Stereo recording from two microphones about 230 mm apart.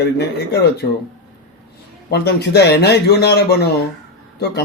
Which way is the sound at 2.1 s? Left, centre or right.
Left.